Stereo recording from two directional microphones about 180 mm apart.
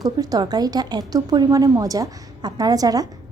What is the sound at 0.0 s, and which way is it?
Speech, 20° right (ahead or behind).